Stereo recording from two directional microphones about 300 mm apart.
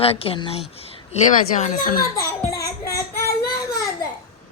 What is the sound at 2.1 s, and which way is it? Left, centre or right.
Child singing, centre.